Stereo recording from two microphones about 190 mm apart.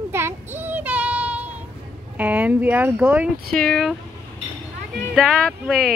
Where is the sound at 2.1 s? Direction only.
10° right (ahead or behind).